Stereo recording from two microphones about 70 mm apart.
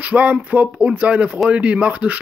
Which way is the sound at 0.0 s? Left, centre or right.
Right.